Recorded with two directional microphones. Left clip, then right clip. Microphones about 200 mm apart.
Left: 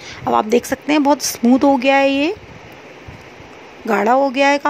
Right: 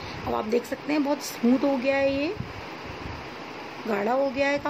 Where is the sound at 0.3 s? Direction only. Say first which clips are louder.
Left 11 dB; 45° left (ahead or behind).